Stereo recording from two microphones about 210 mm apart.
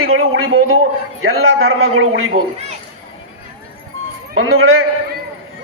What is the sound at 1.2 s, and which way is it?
A man's voice, 75° right (ahead or behind).